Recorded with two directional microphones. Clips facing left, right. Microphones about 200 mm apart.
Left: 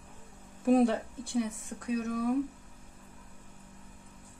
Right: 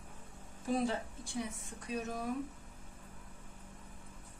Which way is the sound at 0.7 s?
65° left (ahead or behind).